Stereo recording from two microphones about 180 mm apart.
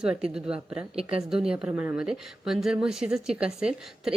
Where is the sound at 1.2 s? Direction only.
5° right (ahead or behind).